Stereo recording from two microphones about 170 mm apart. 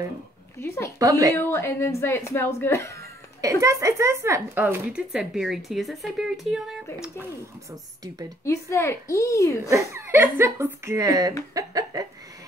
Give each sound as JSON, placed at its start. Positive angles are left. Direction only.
{"t": 0.6, "sound": "speech", "side_deg": 15}
{"t": 0.9, "sound": "a woman's voice", "side_deg": -20}
{"t": 1.3, "sound": "speech", "side_deg": 15}
{"t": 3.3, "sound": "speech", "side_deg": -20}
{"t": 8.5, "sound": "speech", "side_deg": 15}
{"t": 9.7, "sound": "a woman's voice", "side_deg": -15}